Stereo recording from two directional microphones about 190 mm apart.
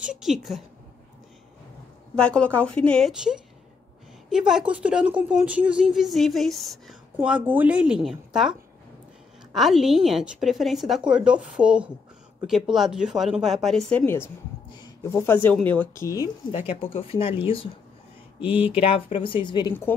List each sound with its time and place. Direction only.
0.0 s a woman's voice: 5° right (ahead or behind)
2.1 s a woman's voice: 5° left (ahead or behind)
16.5 s speech: 30° left (ahead or behind)
18.4 s speech: 5° right (ahead or behind)
18.7 s speech: 30° left (ahead or behind)